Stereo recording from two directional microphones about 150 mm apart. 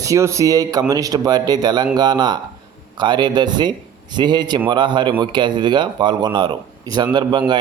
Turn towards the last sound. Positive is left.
turn(degrees=-30)  # may be behind; listen again after turning